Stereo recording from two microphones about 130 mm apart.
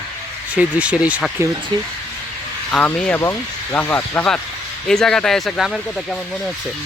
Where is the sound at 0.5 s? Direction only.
10° right (ahead or behind).